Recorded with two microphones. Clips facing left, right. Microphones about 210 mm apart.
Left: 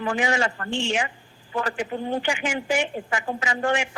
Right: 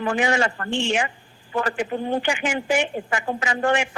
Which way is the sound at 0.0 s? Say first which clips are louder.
Right 2 dB; 55° right (ahead or behind).